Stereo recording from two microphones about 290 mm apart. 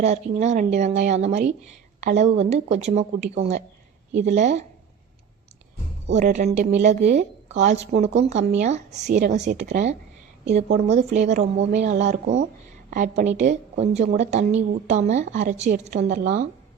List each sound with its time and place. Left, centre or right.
0.0 s a woman's voice: right
6.1 s a woman's voice: right